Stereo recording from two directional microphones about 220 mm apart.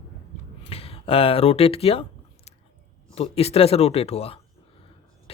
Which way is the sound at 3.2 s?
25° left (ahead or behind).